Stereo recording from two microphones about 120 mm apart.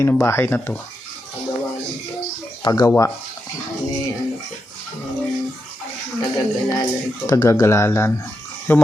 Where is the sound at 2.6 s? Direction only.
25° left (ahead or behind).